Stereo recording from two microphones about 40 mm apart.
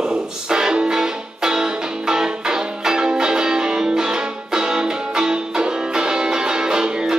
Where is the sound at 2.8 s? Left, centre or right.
Centre.